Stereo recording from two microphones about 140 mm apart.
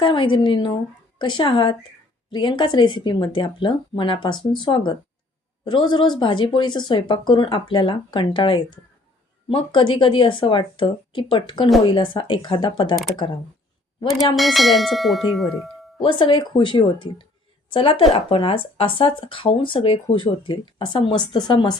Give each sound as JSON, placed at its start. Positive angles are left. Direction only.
{"t": 0.0, "sound": "speech", "side_deg": 35}
{"t": 14.3, "sound": "tubular bells", "side_deg": 0}
{"t": 16.0, "sound": "speech", "side_deg": 35}